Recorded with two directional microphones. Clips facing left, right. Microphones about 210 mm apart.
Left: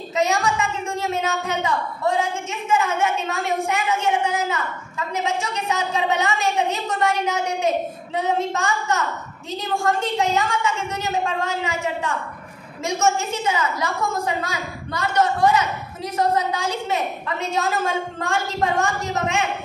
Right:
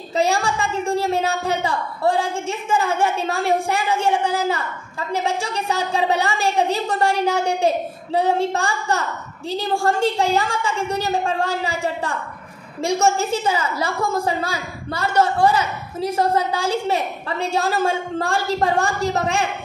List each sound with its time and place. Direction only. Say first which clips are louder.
0.1 s a woman's voice: right 1 dB; 30° right (ahead or behind)